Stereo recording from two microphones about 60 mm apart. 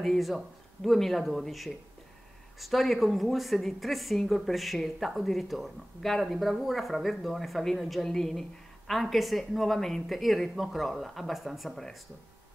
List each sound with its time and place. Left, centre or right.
0.0 s speech: centre